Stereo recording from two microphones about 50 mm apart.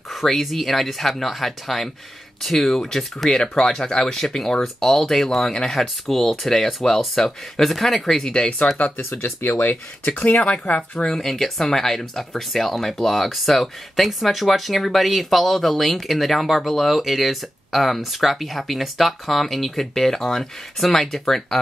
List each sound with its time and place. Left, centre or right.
0.1 s speech: centre
8.3 s speech: centre
11.1 s speech: centre